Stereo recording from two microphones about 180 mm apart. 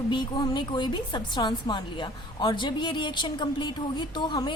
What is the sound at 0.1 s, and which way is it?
A woman's voice, 25° left (ahead or behind).